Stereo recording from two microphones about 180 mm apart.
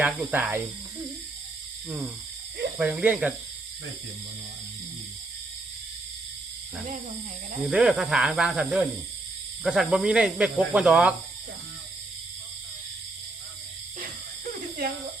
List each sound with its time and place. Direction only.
0.0 s speech: 10° right (ahead or behind)
2.7 s speech: 5° right (ahead or behind)
7.6 s speech: 5° right (ahead or behind)